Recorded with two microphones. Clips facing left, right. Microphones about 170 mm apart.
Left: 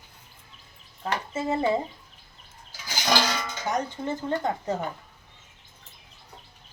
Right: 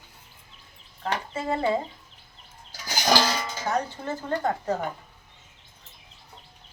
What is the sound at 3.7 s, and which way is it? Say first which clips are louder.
Speech: even; 20° left (ahead or behind).